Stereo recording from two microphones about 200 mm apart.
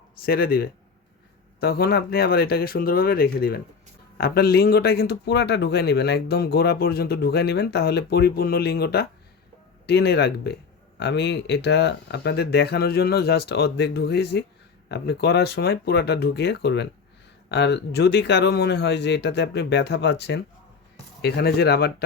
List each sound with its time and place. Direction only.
0.2 s a man's voice: 50° left (ahead or behind)